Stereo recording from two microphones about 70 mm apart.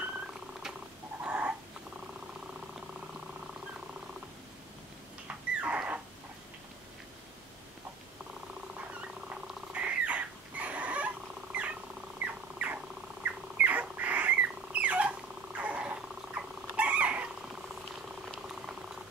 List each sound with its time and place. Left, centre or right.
0.0 s cat: centre
1.2 s a sound: centre
5.6 s dog: centre
9.7 s a sound: centre
12.2 s dog: right
16.2 s cat: centre
18.5 s cat: centre